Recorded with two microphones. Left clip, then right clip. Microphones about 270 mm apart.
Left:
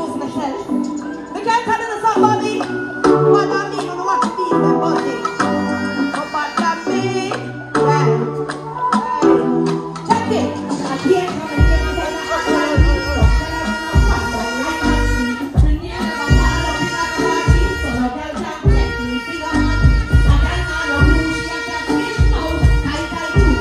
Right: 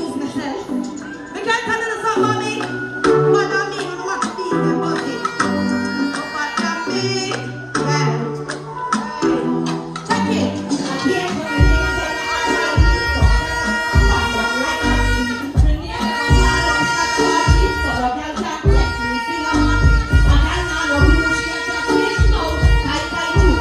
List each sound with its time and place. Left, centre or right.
1.5 s music: centre
7.7 s music: centre